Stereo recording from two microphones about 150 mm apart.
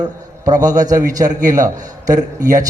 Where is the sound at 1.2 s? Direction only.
60° right (ahead or behind).